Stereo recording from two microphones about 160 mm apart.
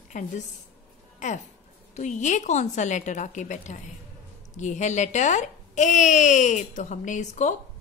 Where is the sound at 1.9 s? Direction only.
50° left (ahead or behind).